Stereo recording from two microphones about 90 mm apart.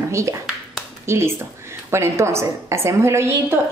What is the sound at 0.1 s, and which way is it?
A woman's voice, 35° right (ahead or behind).